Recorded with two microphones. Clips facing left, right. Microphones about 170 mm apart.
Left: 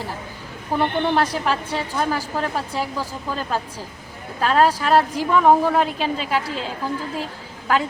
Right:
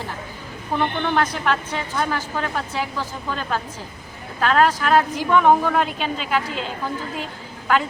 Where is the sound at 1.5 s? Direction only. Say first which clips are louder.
Even; 35° left (ahead or behind).